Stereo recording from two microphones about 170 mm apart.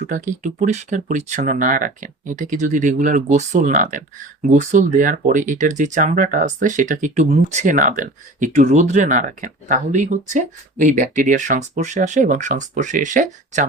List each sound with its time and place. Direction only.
0.1 s speech: 45° right (ahead or behind)